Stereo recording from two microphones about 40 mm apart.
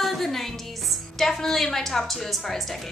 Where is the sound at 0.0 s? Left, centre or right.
Centre.